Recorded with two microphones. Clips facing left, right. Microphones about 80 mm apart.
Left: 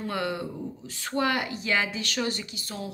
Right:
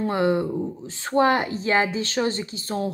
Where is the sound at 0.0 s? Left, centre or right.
Right.